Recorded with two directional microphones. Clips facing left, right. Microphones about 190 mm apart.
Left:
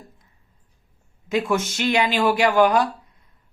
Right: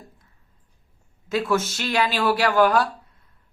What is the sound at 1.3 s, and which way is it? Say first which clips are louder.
Speech: left 1 dB; 15° left (ahead or behind).